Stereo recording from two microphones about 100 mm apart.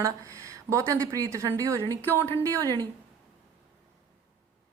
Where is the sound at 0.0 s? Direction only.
30° right (ahead or behind).